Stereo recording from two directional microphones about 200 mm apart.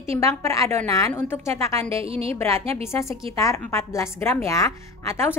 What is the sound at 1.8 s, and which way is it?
Speech, 30° right (ahead or behind).